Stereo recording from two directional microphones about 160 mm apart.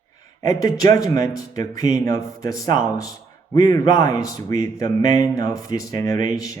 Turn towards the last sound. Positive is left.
turn(degrees=20)  # may be behind; listen again after turning